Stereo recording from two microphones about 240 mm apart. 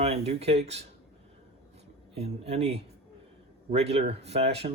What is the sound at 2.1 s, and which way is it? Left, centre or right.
Speech, right.